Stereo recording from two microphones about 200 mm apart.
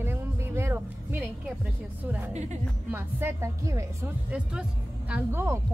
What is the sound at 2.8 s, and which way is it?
Speech, 10° right (ahead or behind).